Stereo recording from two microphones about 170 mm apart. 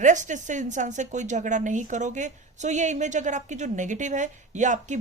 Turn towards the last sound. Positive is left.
turn(degrees=-45)  # may be behind; listen again after turning